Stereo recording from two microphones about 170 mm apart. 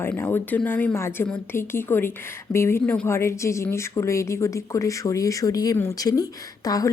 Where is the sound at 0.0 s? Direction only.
10° left (ahead or behind).